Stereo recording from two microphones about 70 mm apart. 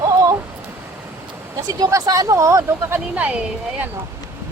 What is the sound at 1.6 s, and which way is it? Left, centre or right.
Speech, right.